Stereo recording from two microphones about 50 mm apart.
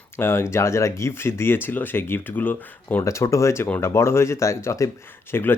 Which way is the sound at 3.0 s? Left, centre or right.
Left.